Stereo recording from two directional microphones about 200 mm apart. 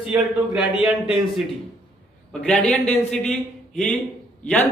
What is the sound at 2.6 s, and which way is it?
A man's voice, 5° left (ahead or behind).